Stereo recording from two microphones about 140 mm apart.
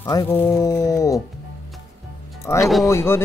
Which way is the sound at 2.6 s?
Centre (ahead or behind).